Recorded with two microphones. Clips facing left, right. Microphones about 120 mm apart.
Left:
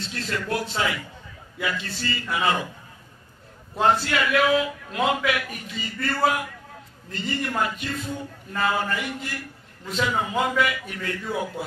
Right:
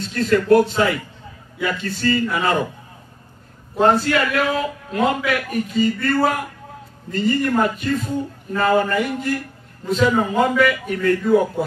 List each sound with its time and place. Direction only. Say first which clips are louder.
0.0 s a man's voice: right 11 dB; 45° right (ahead or behind)
3.8 s a man's voice: right 5 dB; 40° right (ahead or behind)